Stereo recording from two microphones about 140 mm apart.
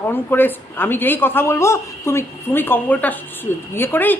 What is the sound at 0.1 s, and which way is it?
A woman's voice, 15° left (ahead or behind).